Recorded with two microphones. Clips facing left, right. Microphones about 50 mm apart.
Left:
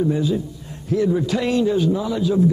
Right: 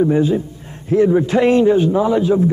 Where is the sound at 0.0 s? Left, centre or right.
Right.